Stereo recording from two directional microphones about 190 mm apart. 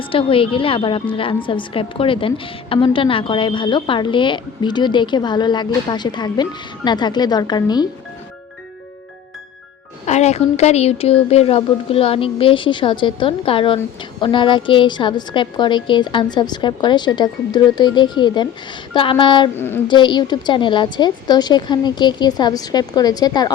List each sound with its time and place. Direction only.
0.0 s a woman's voice: 30° left (ahead or behind)
10.1 s a woman's voice: 35° left (ahead or behind)
19.5 s a woman's voice: 10° left (ahead or behind)
19.9 s a woman's voice: 25° left (ahead or behind)